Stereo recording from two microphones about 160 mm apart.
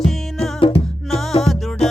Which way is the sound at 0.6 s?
35° left (ahead or behind).